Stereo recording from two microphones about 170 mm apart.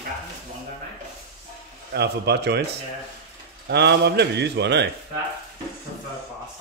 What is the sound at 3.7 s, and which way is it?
Speech, 80° right.